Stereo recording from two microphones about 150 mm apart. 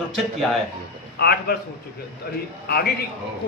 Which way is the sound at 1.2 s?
90° left.